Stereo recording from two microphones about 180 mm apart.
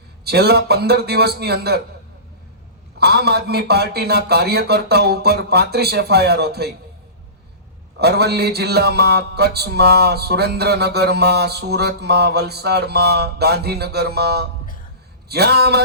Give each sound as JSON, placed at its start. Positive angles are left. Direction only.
{"t": 0.3, "sound": "music", "side_deg": -65}
{"t": 3.0, "sound": "music", "side_deg": -65}
{"t": 7.9, "sound": "music", "side_deg": -65}